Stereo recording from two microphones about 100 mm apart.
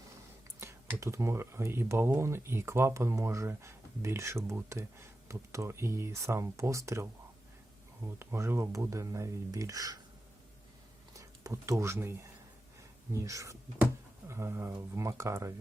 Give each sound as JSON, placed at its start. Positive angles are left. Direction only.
{"t": 0.6, "sound": "speech", "side_deg": -25}
{"t": 11.1, "sound": "speech", "side_deg": -35}
{"t": 13.1, "sound": "speech", "side_deg": -30}